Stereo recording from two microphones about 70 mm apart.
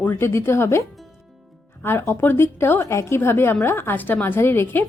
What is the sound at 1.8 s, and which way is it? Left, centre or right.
A woman's voice, left.